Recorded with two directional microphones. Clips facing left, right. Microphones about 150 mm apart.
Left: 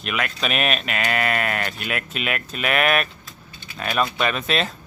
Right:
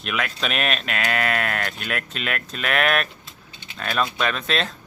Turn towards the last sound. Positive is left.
turn(degrees=5)  # may be behind; listen again after turning